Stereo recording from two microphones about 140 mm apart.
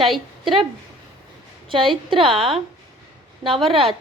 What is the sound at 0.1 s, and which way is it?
Speech, centre (ahead or behind).